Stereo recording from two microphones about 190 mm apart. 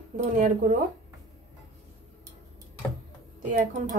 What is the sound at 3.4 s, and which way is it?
Speech, 45° right (ahead or behind).